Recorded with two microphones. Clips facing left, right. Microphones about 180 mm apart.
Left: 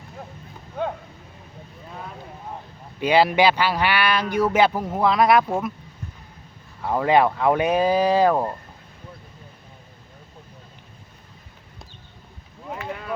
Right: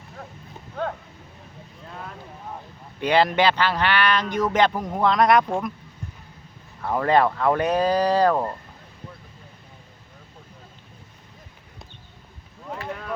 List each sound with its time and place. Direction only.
1.9 s vehicle: 5° left (ahead or behind)
3.0 s speech: 10° left (ahead or behind)
6.8 s speech: 10° left (ahead or behind)
12.9 s speech: 5° left (ahead or behind)